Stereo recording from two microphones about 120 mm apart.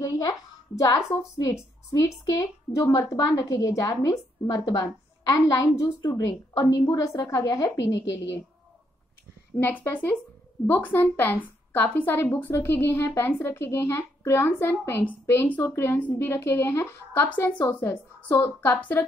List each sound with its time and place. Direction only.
0.0 s a woman's voice: 30° left (ahead or behind)
9.6 s a woman's voice: 15° left (ahead or behind)